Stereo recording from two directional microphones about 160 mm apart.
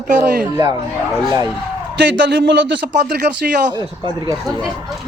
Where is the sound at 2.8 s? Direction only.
65° right (ahead or behind).